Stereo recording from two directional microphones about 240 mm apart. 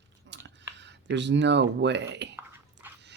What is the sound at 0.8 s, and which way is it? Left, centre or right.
Speech, right.